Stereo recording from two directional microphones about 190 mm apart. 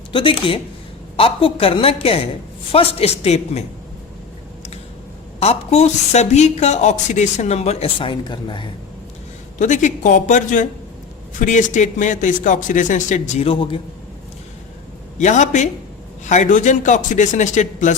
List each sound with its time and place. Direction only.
0.1 s a woman's voice: 25° left (ahead or behind)
5.4 s speech: 35° left (ahead or behind)
9.6 s speech: 40° left (ahead or behind)
15.2 s speech: 40° left (ahead or behind)